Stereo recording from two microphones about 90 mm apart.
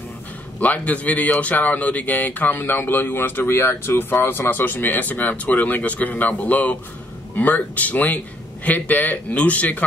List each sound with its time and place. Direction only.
0.6 s a man's voice: 15° left (ahead or behind)